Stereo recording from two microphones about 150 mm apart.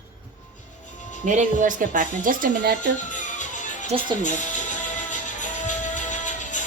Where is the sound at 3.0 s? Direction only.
55° left (ahead or behind).